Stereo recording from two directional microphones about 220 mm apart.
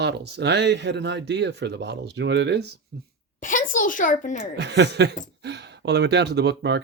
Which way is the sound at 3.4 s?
35° left (ahead or behind).